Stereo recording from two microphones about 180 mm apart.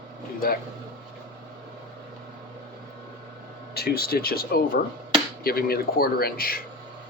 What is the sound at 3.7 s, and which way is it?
Speech, 60° left (ahead or behind).